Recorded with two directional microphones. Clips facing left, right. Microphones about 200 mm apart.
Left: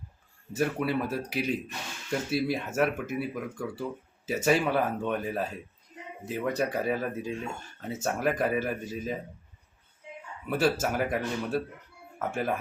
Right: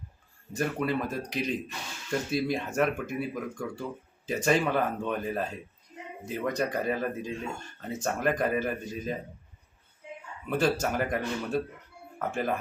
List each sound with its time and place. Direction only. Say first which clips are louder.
0.5 s speech: left 1 dB; 5° left (ahead or behind)
10.5 s speech: even; 5° left (ahead or behind)